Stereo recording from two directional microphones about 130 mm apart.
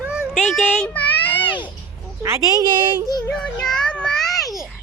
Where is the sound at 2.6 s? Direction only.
35° right (ahead or behind).